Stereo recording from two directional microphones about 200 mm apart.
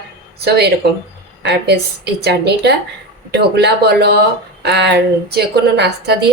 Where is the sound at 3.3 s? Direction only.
55° right (ahead or behind).